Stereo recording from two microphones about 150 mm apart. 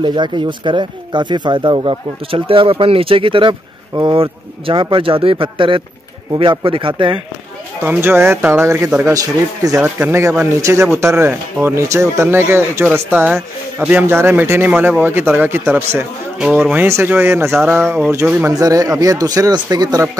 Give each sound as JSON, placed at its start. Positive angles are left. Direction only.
{"t": 0.0, "sound": "speech", "side_deg": -30}
{"t": 7.8, "sound": "speech", "side_deg": -15}
{"t": 18.5, "sound": "speech", "side_deg": -25}